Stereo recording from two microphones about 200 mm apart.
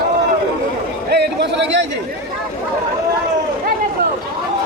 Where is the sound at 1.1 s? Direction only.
60° right (ahead or behind).